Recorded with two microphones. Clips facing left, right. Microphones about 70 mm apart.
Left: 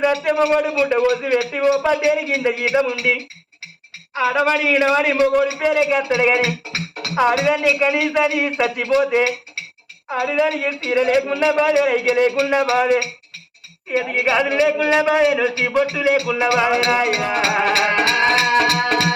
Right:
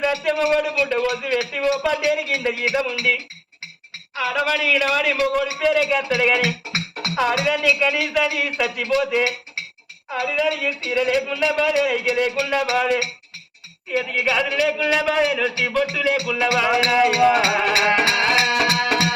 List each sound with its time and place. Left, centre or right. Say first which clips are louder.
0.0 s speech: left 3 dB; left
16.6 s music: even; left
17.4 s speech: left 1 dB; left
18.1 s music: left 3 dB; left